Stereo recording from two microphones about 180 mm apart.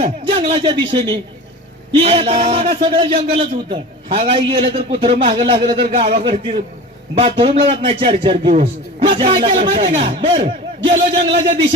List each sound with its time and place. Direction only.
0.0 s a man's voice: 30° right (ahead or behind)